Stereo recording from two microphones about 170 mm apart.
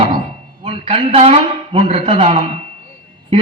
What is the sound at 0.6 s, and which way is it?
A man's voice, 35° right (ahead or behind).